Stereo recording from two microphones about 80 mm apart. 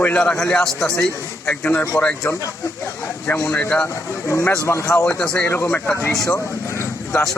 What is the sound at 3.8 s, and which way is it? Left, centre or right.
Speech, left.